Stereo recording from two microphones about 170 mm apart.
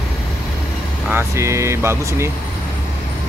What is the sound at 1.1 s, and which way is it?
Speech, 15° right (ahead or behind).